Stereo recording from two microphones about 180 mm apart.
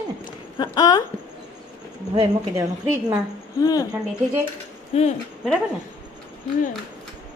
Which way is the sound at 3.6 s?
20° left (ahead or behind).